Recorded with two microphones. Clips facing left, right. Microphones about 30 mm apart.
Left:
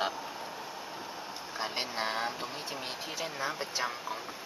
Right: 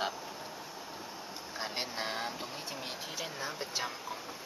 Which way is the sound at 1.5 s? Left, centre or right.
Centre.